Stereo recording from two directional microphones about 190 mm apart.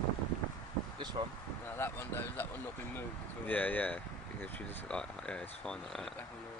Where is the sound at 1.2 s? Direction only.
35° right (ahead or behind).